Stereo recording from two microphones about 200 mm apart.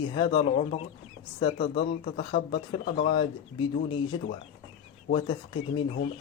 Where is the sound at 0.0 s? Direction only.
25° left (ahead or behind).